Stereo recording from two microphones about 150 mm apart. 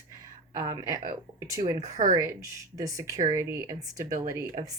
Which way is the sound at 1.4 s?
25° right (ahead or behind).